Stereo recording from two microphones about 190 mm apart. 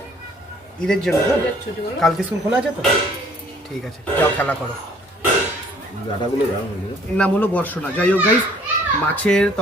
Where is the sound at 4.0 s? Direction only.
10° left (ahead or behind).